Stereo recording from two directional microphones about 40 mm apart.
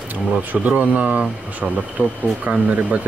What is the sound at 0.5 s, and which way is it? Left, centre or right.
Speech, right.